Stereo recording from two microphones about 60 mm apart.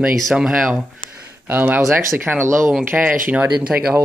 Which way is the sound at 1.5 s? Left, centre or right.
Right.